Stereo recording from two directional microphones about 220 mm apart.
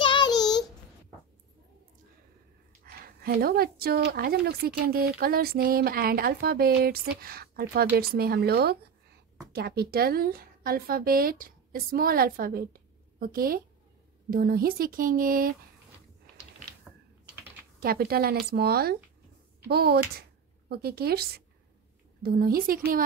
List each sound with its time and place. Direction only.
0.0 s child singing: 20° left (ahead or behind)
2.8 s a woman's voice: 45° right (ahead or behind)
17.7 s speech: 45° right (ahead or behind)